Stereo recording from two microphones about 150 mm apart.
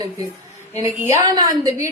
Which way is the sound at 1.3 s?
25° right (ahead or behind).